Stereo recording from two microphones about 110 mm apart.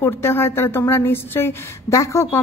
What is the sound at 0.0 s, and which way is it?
Speech, 20° left (ahead or behind).